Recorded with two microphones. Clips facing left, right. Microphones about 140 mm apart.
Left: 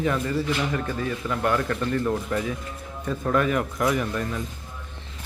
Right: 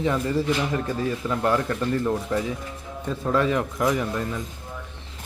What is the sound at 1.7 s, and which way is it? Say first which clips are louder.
Speech: right 1 dB; 15° right (ahead or behind).